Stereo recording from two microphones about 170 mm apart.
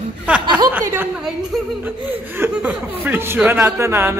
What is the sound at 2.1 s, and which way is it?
Speech, 10° right (ahead or behind).